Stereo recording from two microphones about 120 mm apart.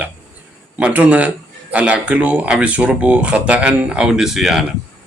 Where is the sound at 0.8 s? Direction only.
10° right (ahead or behind).